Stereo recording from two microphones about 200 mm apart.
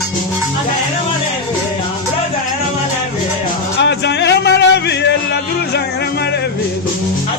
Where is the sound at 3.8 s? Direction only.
60° left (ahead or behind).